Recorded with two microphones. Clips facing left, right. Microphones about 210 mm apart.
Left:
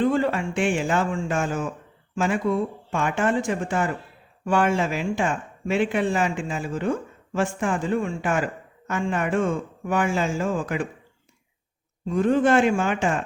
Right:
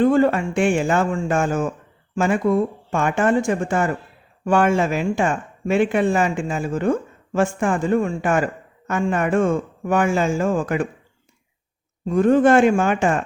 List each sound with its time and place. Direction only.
0.0 s speech: 50° right (ahead or behind)
12.0 s speech: 50° right (ahead or behind)